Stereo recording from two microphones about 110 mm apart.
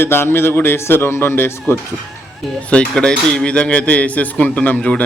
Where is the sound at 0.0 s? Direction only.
20° left (ahead or behind).